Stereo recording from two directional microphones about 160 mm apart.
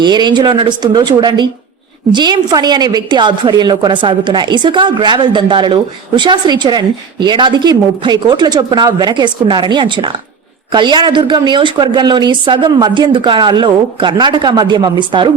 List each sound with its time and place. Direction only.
0.0 s a woman's voice: 30° right (ahead or behind)